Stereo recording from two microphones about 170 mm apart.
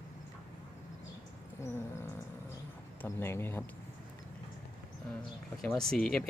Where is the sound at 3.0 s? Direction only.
15° left (ahead or behind).